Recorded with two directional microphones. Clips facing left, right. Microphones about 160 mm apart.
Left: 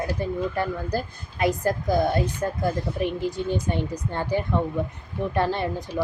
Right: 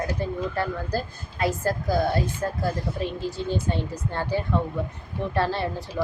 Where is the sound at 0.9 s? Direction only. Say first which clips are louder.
Left 1 dB; 15° left (ahead or behind).